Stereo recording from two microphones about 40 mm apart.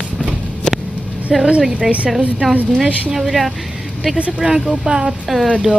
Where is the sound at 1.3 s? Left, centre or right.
Centre.